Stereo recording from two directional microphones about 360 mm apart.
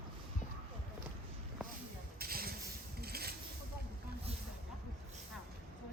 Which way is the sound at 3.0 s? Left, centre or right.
Right.